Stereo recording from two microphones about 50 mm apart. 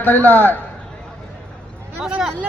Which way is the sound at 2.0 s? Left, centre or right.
Centre.